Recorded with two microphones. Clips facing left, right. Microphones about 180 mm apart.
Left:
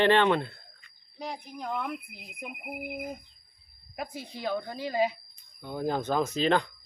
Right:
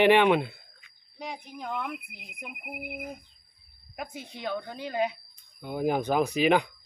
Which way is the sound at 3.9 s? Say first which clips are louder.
Left 1 dB; centre (ahead or behind).